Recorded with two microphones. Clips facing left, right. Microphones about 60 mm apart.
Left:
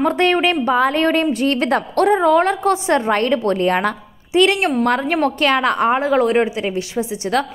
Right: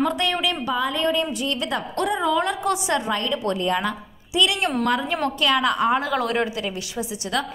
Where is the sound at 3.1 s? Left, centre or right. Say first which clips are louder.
Left 7 dB; left.